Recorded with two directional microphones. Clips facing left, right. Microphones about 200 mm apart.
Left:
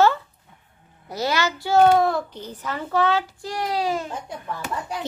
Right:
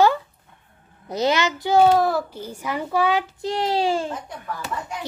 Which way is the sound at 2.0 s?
5° right (ahead or behind).